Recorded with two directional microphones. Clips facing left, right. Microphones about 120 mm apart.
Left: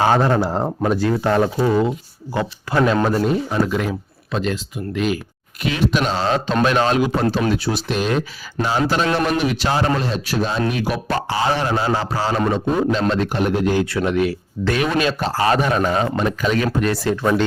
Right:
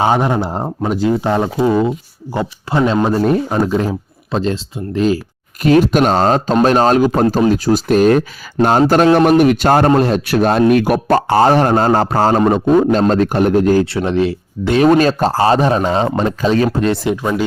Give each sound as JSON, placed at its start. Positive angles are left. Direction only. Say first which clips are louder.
{"t": 0.0, "sound": "speech", "louder": "right 2 dB", "side_deg": -15}
{"t": 3.2, "sound": "a man's voice", "louder": "right 5 dB", "side_deg": -50}
{"t": 3.7, "sound": "speech", "louder": "right 5 dB", "side_deg": -30}
{"t": 5.6, "sound": "a man's voice", "louder": "right 9 dB", "side_deg": -45}
{"t": 9.4, "sound": "a man's voice", "louder": "right 9 dB", "side_deg": -50}
{"t": 13.8, "sound": "speech", "louder": "right 3 dB", "side_deg": -30}
{"t": 14.8, "sound": "speech", "louder": "right 9 dB", "side_deg": -40}
{"t": 16.8, "sound": "speech", "louder": "right 3 dB", "side_deg": -20}